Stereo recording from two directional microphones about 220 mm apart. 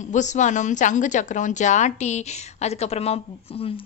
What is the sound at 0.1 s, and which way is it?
Speech, 35° left (ahead or behind).